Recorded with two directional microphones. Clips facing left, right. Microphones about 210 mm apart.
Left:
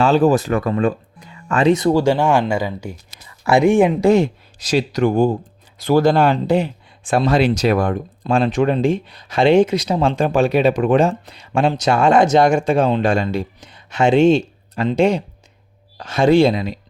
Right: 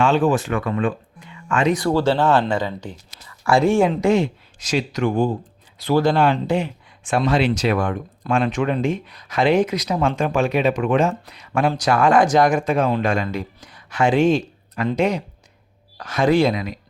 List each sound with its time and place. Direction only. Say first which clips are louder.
0.0 s speech: left 3 dB; 40° left (ahead or behind)
1.7 s speech: left 4 dB; 20° left (ahead or behind)
4.0 s speech: left 4 dB; 35° left (ahead or behind)